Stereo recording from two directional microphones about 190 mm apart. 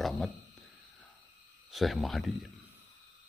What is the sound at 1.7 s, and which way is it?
Speech, centre (ahead or behind).